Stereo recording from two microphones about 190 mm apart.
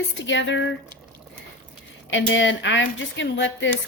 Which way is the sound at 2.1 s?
80° left.